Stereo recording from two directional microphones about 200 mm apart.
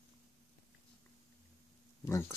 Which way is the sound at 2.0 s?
15° left (ahead or behind).